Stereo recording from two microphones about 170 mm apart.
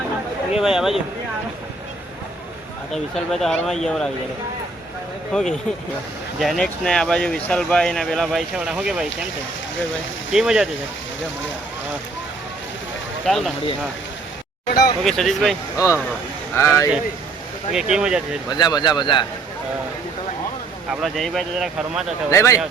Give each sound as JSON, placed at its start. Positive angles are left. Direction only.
{"t": 0.5, "sound": "speech", "side_deg": -5}
{"t": 2.9, "sound": "speech", "side_deg": 0}
{"t": 5.3, "sound": "speech", "side_deg": 0}
{"t": 10.3, "sound": "speech", "side_deg": -5}
{"t": 13.2, "sound": "speech", "side_deg": 0}
{"t": 14.7, "sound": "speech", "side_deg": 65}
{"t": 15.0, "sound": "speech", "side_deg": 0}
{"t": 16.6, "sound": "speech", "side_deg": 15}
{"t": 17.7, "sound": "speech", "side_deg": -5}
{"t": 18.4, "sound": "speech", "side_deg": 25}
{"t": 21.0, "sound": "speech", "side_deg": 0}
{"t": 22.3, "sound": "speech", "side_deg": 15}